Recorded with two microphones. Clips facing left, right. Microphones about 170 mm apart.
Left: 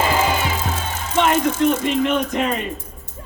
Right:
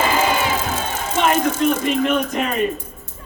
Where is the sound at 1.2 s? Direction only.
20° left (ahead or behind).